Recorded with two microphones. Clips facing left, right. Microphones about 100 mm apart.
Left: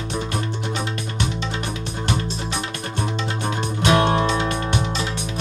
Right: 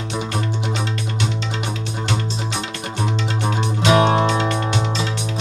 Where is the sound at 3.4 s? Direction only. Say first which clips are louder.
Right 2 dB; 25° right (ahead or behind).